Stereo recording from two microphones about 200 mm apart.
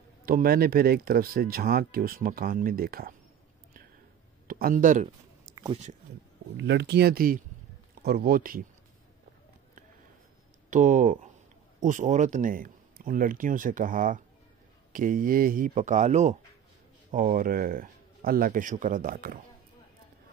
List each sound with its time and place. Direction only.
0.2 s speech: 45° right (ahead or behind)
4.5 s speech: 45° right (ahead or behind)
5.5 s a sound: 20° right (ahead or behind)
6.5 s speech: 60° right (ahead or behind); by 8.6 s 45° right (ahead or behind)
10.7 s speech: 40° right (ahead or behind)